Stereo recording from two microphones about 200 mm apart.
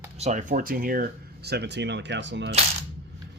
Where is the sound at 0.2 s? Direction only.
35° right (ahead or behind); by 2.6 s 60° right (ahead or behind).